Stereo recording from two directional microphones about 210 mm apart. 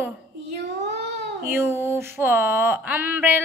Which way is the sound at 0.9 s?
55° right (ahead or behind).